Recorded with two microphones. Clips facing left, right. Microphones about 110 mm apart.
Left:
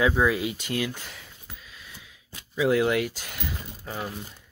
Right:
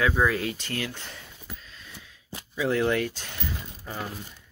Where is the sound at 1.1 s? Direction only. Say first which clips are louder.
Right 3 dB; 10° left (ahead or behind).